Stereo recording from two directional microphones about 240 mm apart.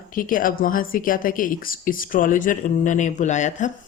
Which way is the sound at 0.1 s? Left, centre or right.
Left.